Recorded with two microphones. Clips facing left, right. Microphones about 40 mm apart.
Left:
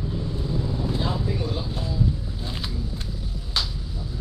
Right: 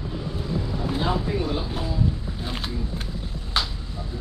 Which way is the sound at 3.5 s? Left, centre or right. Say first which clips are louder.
Right 2 dB; right.